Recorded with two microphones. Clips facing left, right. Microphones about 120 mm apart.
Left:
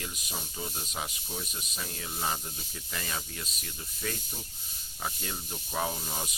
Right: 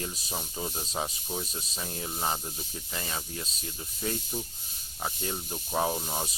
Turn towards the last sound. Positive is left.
turn(degrees=-35)  # may be behind; listen again after turning